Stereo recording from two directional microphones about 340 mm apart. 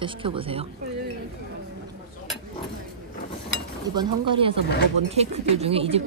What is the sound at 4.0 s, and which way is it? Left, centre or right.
Speech, centre.